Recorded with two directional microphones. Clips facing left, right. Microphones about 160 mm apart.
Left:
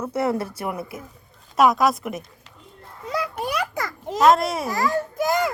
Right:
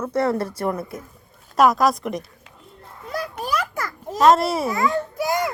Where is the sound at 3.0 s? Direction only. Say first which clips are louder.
Left 2 dB; 75° left (ahead or behind).